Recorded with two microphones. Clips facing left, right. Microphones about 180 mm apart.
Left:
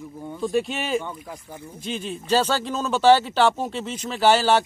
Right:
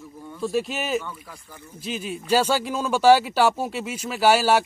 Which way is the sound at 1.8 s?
5° right (ahead or behind).